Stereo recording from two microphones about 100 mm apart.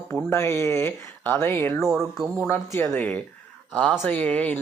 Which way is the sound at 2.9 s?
15° left (ahead or behind).